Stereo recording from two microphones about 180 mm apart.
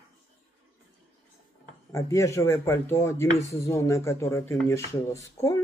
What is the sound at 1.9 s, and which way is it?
Speech, 15° left (ahead or behind).